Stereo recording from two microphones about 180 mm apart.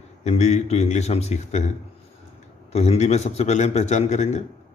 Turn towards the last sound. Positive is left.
turn(degrees=40)  # may be behind; listen again after turning